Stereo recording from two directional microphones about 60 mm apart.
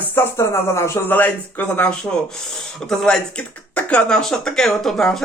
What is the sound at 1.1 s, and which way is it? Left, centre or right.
Speech, left.